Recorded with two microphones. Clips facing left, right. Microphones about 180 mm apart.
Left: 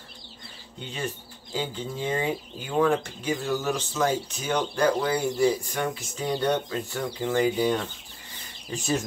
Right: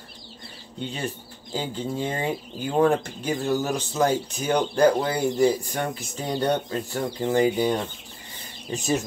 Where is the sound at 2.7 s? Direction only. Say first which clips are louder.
Right 2 dB; 35° right (ahead or behind).